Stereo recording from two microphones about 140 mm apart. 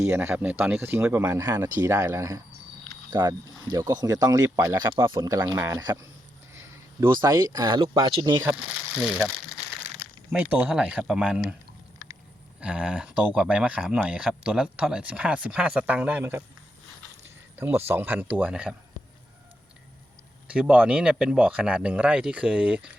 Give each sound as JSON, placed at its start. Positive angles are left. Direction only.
{"t": 0.0, "sound": "speech", "side_deg": -20}
{"t": 6.5, "sound": "a sound", "side_deg": -20}
{"t": 7.1, "sound": "speech", "side_deg": -30}
{"t": 10.3, "sound": "speech", "side_deg": -10}
{"t": 12.5, "sound": "speech", "side_deg": -5}
{"t": 20.5, "sound": "speech", "side_deg": -10}